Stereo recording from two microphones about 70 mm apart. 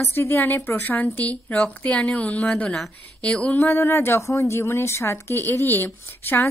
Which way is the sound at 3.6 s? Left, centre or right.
Left.